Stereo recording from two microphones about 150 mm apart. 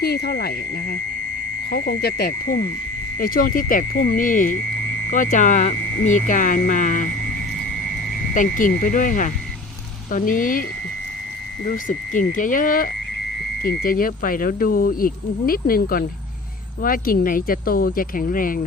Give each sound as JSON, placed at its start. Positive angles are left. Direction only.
{"t": 0.0, "sound": "speech", "side_deg": 90}
{"t": 1.7, "sound": "speech", "side_deg": 90}
{"t": 3.2, "sound": "speech", "side_deg": 70}
{"t": 8.3, "sound": "speech", "side_deg": 60}
{"t": 11.9, "sound": "speech", "side_deg": 60}
{"t": 13.6, "sound": "speech", "side_deg": 80}